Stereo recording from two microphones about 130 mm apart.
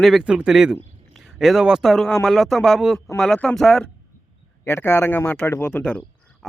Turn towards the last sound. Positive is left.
turn(degrees=5)  # may be behind; listen again after turning